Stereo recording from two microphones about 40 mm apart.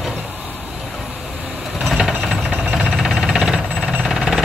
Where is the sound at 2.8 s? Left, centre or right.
Centre.